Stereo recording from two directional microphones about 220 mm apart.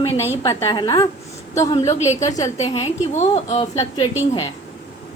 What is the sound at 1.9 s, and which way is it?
A woman's voice, 30° left (ahead or behind).